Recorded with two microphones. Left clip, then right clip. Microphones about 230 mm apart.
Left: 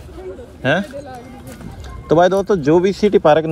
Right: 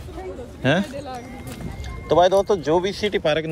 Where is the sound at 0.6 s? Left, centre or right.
Centre.